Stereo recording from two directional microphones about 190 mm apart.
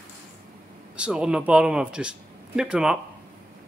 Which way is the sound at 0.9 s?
5° right (ahead or behind).